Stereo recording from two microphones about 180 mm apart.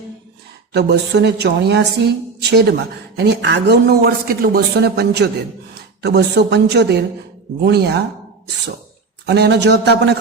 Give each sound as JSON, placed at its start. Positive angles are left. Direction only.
{"t": 0.7, "sound": "a woman's voice", "side_deg": -70}
{"t": 9.2, "sound": "a woman's voice", "side_deg": -70}